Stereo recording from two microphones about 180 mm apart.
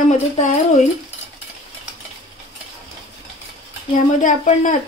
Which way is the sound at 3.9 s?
45° left (ahead or behind).